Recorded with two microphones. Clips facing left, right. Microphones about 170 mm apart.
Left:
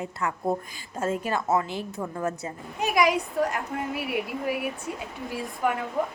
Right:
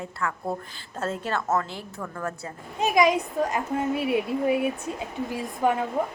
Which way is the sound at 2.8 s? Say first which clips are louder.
Right 2 dB; 20° right (ahead or behind).